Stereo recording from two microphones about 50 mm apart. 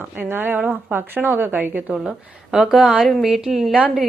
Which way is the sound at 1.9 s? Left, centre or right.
Centre.